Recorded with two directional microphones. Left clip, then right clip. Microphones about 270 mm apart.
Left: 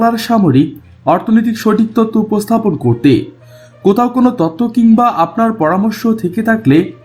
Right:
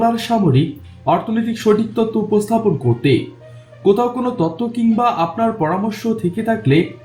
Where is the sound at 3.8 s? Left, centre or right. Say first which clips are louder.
Left 4 dB; left.